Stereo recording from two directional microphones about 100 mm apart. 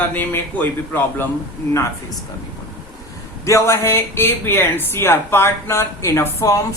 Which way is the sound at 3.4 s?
30° left (ahead or behind).